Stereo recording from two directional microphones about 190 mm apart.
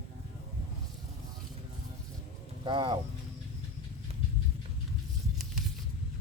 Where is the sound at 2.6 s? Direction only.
25° right (ahead or behind).